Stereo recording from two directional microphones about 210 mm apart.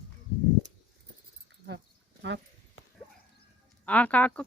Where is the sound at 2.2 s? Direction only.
60° right (ahead or behind).